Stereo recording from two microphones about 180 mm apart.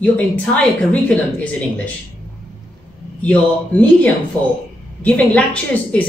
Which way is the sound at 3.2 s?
10° left (ahead or behind).